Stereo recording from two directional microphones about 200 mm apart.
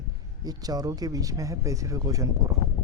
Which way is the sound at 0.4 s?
20° right (ahead or behind).